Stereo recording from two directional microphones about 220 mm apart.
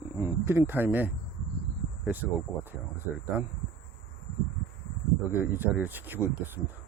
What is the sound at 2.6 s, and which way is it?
Speech, 10° right (ahead or behind).